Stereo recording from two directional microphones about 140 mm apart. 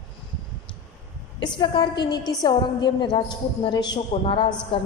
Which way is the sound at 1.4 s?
30° left (ahead or behind).